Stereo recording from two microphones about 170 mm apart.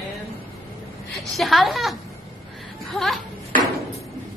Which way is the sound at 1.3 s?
Centre (ahead or behind).